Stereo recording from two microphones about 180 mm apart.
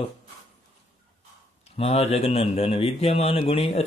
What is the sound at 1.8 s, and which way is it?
Speech, 35° left (ahead or behind).